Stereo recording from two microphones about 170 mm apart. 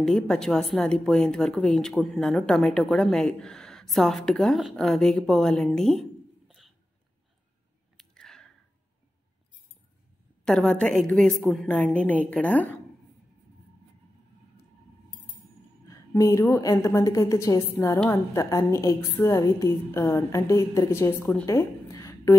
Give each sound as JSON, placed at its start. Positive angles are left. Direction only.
{"t": 0.0, "sound": "a woman's voice", "side_deg": 5}
{"t": 8.0, "sound": "a sound", "side_deg": 5}
{"t": 10.4, "sound": "a woman's voice", "side_deg": 5}
{"t": 15.9, "sound": "a woman's voice", "side_deg": 20}